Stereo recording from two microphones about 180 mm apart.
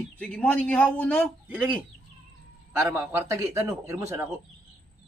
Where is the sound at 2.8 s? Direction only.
15° right (ahead or behind).